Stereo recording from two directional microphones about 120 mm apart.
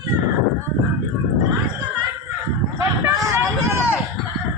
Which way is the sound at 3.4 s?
15° right (ahead or behind).